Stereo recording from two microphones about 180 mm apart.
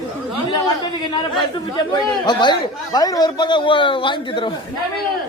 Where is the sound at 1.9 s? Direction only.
25° left (ahead or behind).